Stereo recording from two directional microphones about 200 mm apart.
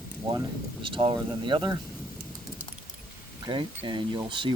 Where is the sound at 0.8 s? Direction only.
25° right (ahead or behind).